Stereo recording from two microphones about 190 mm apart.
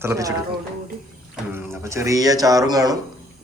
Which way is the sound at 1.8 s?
15° right (ahead or behind).